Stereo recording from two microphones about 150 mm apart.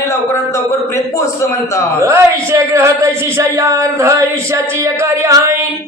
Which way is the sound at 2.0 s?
20° right (ahead or behind).